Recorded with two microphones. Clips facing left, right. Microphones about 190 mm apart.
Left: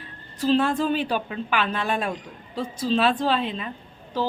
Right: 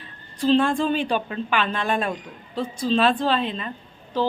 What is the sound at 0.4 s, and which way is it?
A woman's voice, 5° left (ahead or behind).